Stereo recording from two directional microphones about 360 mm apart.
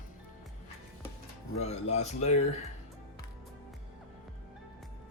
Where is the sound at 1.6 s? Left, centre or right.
Centre.